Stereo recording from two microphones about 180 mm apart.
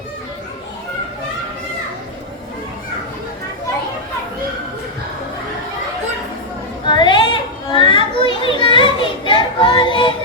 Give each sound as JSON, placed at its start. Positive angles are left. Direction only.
{"t": 6.8, "sound": "chatter", "side_deg": 25}
{"t": 7.7, "sound": "children playing", "side_deg": 25}